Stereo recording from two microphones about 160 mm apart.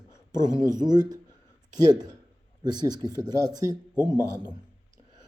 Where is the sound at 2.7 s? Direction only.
25° right (ahead or behind).